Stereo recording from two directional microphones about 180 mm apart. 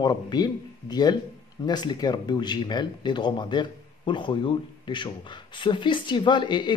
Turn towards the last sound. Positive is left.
turn(degrees=25)  # may be behind; listen again after turning